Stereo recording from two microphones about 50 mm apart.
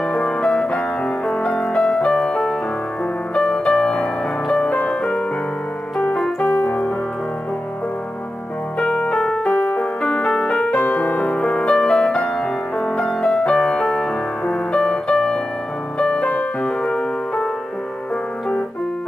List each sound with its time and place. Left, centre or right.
0.0 s music: centre
6.1 s keyboard: centre
6.6 s piano: left
8.7 s piano: centre
9.4 s music: left
11.1 s music: left